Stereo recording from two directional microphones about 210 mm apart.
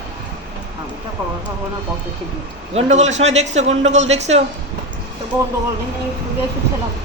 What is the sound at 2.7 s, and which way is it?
A man's voice, 35° right (ahead or behind).